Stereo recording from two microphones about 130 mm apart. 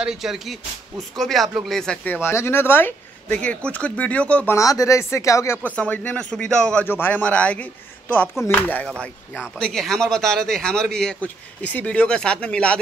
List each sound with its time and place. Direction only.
0.0 s speech: 5° right (ahead or behind)
2.2 s a man's voice: 20° left (ahead or behind)
4.6 s speech: 25° left (ahead or behind)
5.8 s a man's voice: 10° left (ahead or behind)